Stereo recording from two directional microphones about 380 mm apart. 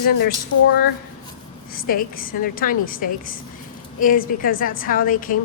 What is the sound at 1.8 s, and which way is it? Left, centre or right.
A woman's voice, left.